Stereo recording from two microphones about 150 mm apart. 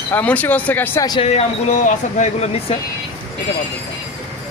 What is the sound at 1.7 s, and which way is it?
Speech, 55° left (ahead or behind).